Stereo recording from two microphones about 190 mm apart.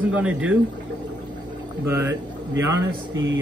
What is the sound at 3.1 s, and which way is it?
Speech, 75° right (ahead or behind).